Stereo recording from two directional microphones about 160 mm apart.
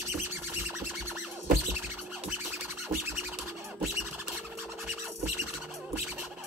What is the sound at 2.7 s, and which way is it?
Music, 15° right (ahead or behind).